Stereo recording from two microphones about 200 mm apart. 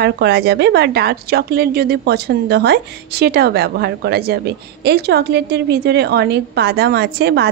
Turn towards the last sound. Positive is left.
turn(degrees=-55)  # may be behind; listen again after turning